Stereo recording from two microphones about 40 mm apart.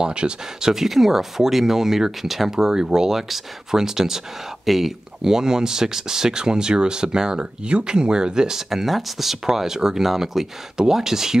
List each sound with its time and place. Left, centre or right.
0.0 s speech: right; by 4.9 s centre
5.2 s speech: centre